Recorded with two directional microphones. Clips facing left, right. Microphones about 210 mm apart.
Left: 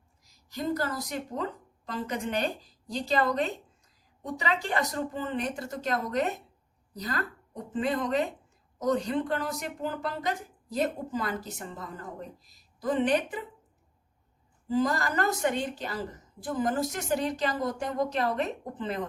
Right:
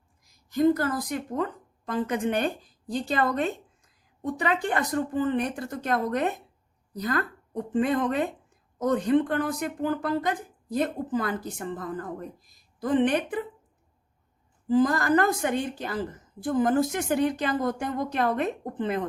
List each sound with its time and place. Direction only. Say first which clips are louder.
0.5 s speech: right 8 dB; 55° right (ahead or behind)
14.7 s speech: right 6 dB; 50° right (ahead or behind)